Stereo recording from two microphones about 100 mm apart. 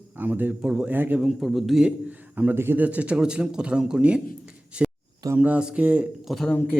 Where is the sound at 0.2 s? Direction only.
20° right (ahead or behind).